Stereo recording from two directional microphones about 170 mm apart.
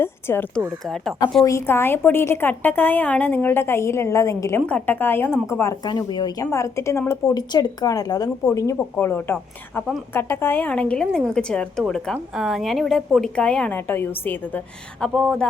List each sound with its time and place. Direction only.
0.0 s speech: 15° left (ahead or behind)
0.9 s a woman's voice: centre (ahead or behind)
1.5 s a woman's voice: 15° left (ahead or behind)
15.0 s a woman's voice: centre (ahead or behind)